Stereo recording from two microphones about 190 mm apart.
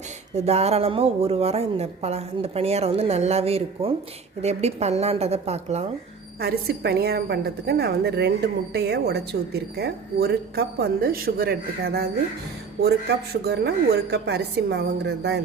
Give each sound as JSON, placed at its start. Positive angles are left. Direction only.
{"t": 0.3, "sound": "a woman's voice", "side_deg": -35}
{"t": 6.4, "sound": "a woman's voice", "side_deg": -55}
{"t": 13.4, "sound": "a woman's voice", "side_deg": -60}